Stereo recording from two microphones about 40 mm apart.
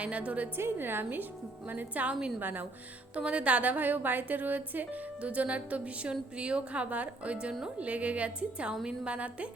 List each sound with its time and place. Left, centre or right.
0.0 s speech: right
0.5 s a woman's voice: right
3.2 s a woman's voice: right
5.2 s speech: right
6.9 s a woman's voice: right
9.1 s speech: right